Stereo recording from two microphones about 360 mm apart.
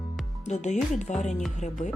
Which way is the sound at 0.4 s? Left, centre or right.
Centre.